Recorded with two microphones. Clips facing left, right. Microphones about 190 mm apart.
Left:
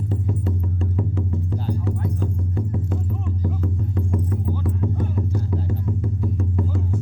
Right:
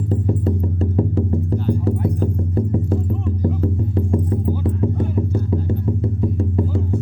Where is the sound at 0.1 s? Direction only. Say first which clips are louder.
Right 8 dB; 40° right (ahead or behind).